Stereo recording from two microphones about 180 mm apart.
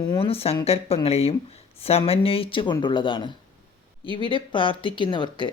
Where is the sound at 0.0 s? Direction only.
25° left (ahead or behind).